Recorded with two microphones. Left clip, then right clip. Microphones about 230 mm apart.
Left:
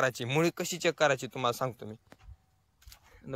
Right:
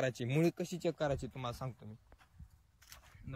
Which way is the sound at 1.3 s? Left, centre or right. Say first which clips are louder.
Left 13 dB; left.